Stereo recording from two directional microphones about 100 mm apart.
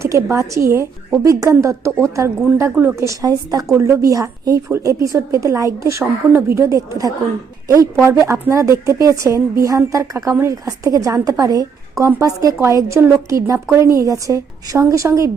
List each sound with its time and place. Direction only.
0.0 s a woman's voice: 25° right (ahead or behind)
8.3 s a woman's voice: 30° right (ahead or behind)